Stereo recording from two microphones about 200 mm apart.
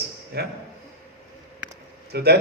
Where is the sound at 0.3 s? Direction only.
55° right (ahead or behind).